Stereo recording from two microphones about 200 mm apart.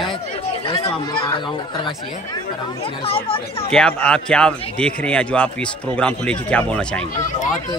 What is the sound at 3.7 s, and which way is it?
A man's voice, 5° left (ahead or behind).